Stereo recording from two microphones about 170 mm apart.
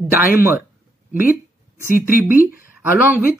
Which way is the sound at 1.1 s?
10° right (ahead or behind).